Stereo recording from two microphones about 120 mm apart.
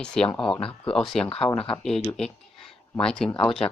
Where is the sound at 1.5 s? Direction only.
50° left (ahead or behind).